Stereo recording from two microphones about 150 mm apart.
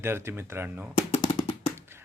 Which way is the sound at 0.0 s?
15° right (ahead or behind).